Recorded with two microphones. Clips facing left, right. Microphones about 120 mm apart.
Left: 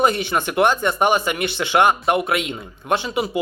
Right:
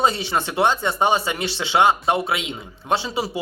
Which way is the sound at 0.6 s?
20° right (ahead or behind).